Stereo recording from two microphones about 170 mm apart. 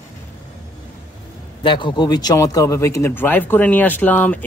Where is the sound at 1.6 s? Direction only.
30° left (ahead or behind).